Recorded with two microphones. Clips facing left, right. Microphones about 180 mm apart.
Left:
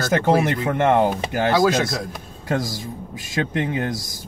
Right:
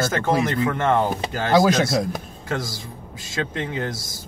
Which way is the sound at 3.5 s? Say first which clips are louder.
Left 5 dB; 20° left (ahead or behind).